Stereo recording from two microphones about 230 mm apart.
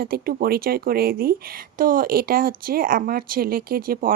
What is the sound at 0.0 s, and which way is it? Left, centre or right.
Speech, right.